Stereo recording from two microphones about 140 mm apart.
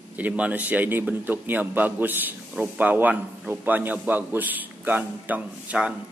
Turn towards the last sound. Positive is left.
turn(degrees=-10)  # may be behind; listen again after turning